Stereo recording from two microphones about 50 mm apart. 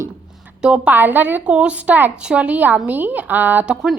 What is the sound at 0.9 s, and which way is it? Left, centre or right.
Speech, right.